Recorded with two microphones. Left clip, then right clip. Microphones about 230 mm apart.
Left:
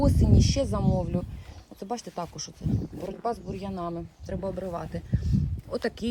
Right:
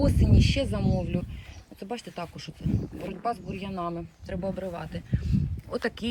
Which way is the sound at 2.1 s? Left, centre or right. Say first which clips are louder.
Left 2 dB; left.